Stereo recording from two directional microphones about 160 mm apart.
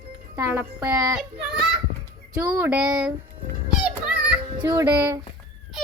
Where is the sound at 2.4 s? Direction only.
15° right (ahead or behind).